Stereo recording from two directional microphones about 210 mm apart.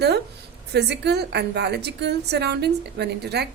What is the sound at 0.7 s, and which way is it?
A woman's voice, 50° right (ahead or behind).